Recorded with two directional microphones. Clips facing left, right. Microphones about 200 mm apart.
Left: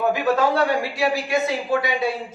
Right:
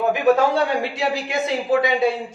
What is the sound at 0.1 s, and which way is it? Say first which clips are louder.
Speech: right 3 dB; 25° right (ahead or behind).